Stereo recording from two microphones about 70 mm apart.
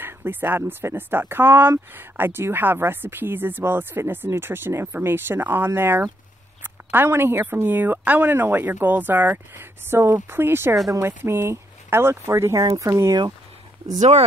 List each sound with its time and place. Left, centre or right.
0.0 s a woman's voice: right